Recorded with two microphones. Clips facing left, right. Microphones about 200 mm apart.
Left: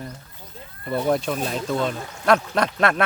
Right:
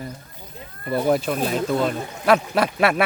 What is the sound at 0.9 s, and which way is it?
Speech, 5° right (ahead or behind).